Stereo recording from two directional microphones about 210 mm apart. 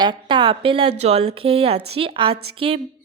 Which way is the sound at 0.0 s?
20° right (ahead or behind).